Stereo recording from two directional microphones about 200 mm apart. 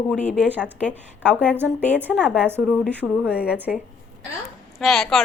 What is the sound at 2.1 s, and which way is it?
Speech, 5° left (ahead or behind).